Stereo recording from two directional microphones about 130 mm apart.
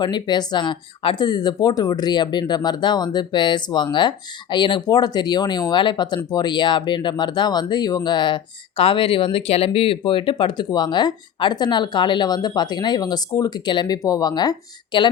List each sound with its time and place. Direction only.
0.0 s speech: 35° left (ahead or behind)